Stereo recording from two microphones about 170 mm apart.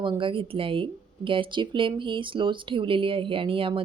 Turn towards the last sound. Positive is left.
turn(degrees=-30)  # may be behind; listen again after turning